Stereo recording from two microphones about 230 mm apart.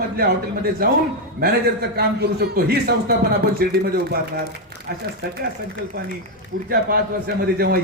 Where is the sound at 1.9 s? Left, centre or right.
Right.